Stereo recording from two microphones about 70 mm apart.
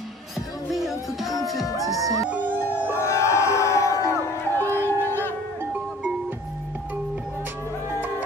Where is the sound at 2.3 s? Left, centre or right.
Right.